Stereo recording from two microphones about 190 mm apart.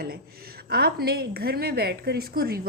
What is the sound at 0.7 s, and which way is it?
A woman's voice, 55° right (ahead or behind).